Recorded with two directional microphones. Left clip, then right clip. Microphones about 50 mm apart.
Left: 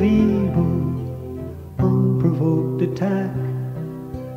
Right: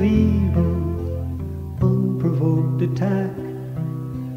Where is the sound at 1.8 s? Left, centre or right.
Left.